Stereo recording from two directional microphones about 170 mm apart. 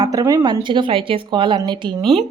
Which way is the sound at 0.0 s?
20° right (ahead or behind).